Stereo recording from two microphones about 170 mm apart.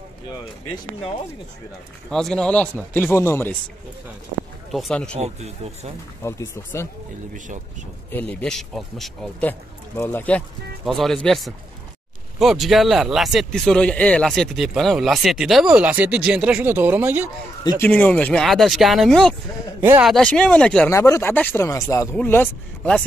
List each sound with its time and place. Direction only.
2.0 s speech: 5° left (ahead or behind)
4.7 s speech: 5° left (ahead or behind)
5.1 s speech: 40° right (ahead or behind)
6.2 s speech: 15° left (ahead or behind)
7.3 s speech: 50° right (ahead or behind)
8.1 s speech: 10° left (ahead or behind); by 17.3 s 10° right (ahead or behind)
17.8 s speech: 10° left (ahead or behind)
19.8 s speech: 10° right (ahead or behind)
20.1 s speech: 5° left (ahead or behind)
20.9 s speech: 15° left (ahead or behind)